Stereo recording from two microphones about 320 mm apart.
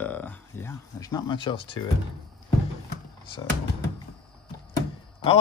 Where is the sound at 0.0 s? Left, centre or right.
Centre.